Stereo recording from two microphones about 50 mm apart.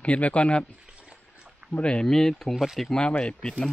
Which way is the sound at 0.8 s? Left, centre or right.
Right.